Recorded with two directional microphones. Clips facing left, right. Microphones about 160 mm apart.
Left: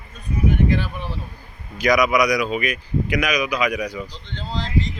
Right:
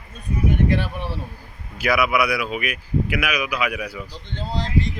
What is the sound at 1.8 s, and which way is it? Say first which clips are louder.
Speech: left 3 dB; 5° right (ahead or behind).